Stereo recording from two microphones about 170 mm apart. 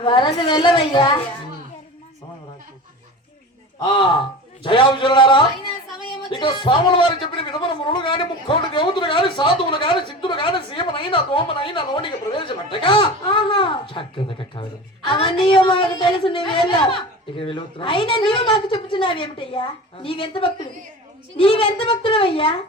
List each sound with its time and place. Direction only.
0.0 s speech: 30° left (ahead or behind)
3.8 s a man's voice: 30° left (ahead or behind)